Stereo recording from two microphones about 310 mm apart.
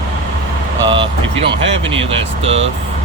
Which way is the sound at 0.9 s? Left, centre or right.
Centre.